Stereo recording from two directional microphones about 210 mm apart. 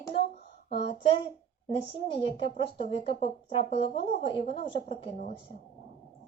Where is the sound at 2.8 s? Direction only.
30° left (ahead or behind).